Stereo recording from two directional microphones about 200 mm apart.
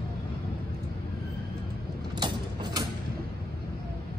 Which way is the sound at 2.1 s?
20° right (ahead or behind).